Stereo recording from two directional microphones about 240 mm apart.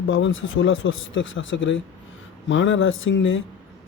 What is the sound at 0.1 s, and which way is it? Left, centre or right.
Speech, left.